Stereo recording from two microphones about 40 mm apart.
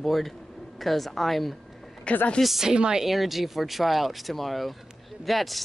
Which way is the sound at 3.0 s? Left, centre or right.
Centre.